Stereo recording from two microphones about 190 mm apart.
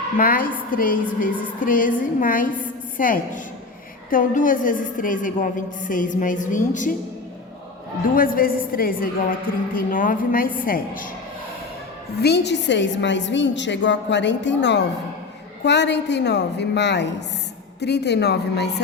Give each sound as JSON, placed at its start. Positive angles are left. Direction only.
{"t": 0.2, "sound": "a woman's voice", "side_deg": 50}
{"t": 8.1, "sound": "a woman's voice", "side_deg": 50}
{"t": 12.2, "sound": "a woman's voice", "side_deg": 65}